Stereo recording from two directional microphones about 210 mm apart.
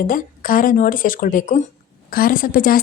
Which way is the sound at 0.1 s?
40° left (ahead or behind).